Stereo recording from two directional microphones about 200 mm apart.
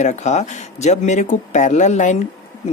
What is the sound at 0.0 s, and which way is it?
Speech, 35° left (ahead or behind).